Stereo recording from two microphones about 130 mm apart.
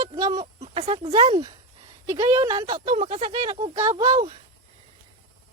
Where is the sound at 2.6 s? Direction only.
45° right (ahead or behind).